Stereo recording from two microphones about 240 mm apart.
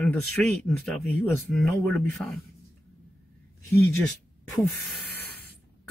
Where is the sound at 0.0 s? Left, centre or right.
Centre.